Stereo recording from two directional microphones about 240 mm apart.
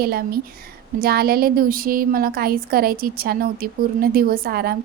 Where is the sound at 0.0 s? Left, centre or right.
Right.